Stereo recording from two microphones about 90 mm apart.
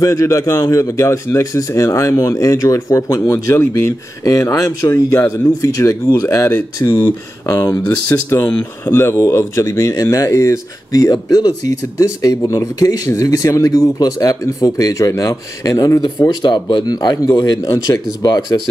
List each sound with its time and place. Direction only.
0.0 s speech: 35° left (ahead or behind)
4.2 s speech: 40° left (ahead or behind)
7.0 s speech: 30° left (ahead or behind); by 18.6 s 50° left (ahead or behind)